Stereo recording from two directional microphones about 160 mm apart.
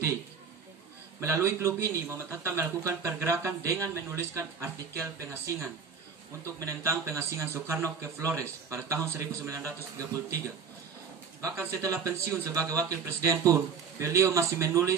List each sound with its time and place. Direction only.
1.2 s speech: 15° right (ahead or behind)
11.4 s a man's voice: 20° right (ahead or behind)